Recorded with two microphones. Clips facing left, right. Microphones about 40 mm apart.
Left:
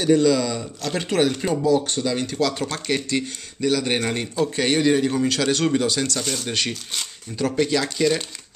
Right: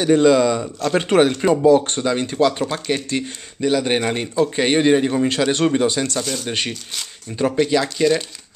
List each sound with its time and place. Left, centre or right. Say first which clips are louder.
0.0 s speech: right 4 dB; right
6.2 s speech: right 2 dB; centre
7.3 s speech: right 4 dB; right
7.6 s speech: right 3 dB; centre